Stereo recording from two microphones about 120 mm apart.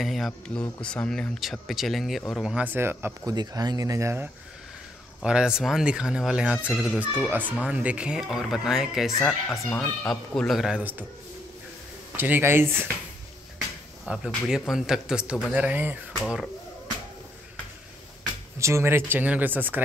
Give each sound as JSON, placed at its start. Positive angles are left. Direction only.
{"t": 0.0, "sound": "speech", "side_deg": 0}
{"t": 2.4, "sound": "speech", "side_deg": -10}
{"t": 3.3, "sound": "speech", "side_deg": -35}
{"t": 5.2, "sound": "speech", "side_deg": -5}
{"t": 7.0, "sound": "speech", "side_deg": -15}
{"t": 9.7, "sound": "speech", "side_deg": 10}
{"t": 10.8, "sound": "speech", "side_deg": -15}
{"t": 12.2, "sound": "speech", "side_deg": -15}
{"t": 14.0, "sound": "speech", "side_deg": -5}
{"t": 16.2, "sound": "speech", "side_deg": 0}
{"t": 18.6, "sound": "speech", "side_deg": -25}